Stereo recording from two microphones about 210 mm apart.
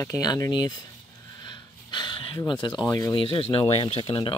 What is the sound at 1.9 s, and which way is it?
Speech, 20° left (ahead or behind).